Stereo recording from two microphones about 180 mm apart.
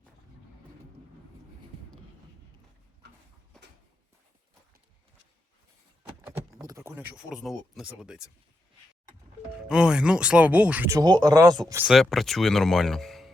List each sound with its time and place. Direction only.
3.0 s a sound: 65° right (ahead or behind)
6.0 s keys jangling: 10° right (ahead or behind)
9.6 s speech: 5° right (ahead or behind); by 11.8 s 20° right (ahead or behind)
11.8 s speech: centre (ahead or behind)